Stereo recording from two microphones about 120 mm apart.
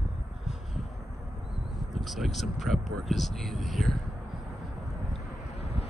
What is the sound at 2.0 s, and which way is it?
Speech, centre (ahead or behind).